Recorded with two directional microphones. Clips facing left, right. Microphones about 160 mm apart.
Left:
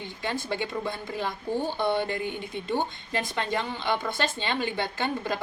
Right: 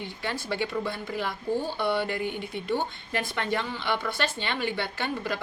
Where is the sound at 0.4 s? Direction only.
20° left (ahead or behind).